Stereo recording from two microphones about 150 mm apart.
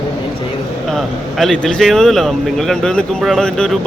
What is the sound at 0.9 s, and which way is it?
Speech, centre (ahead or behind).